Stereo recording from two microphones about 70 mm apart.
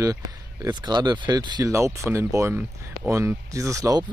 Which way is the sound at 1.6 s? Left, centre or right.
Right.